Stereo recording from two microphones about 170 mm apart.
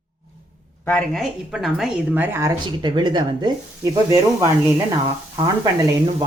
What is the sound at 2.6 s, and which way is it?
Speech, 25° right (ahead or behind).